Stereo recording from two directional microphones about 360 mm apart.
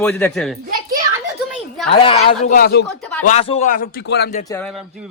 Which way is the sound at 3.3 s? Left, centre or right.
Centre.